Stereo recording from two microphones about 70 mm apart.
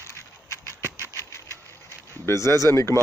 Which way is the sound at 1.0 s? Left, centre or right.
Left.